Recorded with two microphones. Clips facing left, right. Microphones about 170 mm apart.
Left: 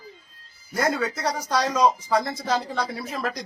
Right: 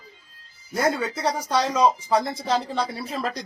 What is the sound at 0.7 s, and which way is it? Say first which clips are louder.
Speech: right 1 dB; 25° right (ahead or behind).